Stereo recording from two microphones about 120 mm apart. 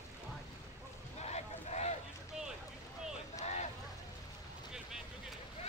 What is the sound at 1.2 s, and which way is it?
Boat, 65° left (ahead or behind).